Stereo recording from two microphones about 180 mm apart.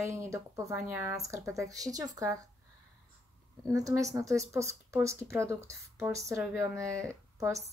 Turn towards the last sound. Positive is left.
turn(degrees=-15)  # may be behind; listen again after turning